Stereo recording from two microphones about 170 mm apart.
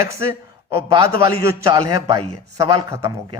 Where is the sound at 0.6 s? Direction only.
20° right (ahead or behind).